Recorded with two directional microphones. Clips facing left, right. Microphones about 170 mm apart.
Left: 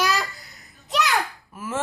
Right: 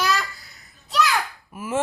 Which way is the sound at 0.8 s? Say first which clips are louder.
Right 2 dB; 20° left (ahead or behind).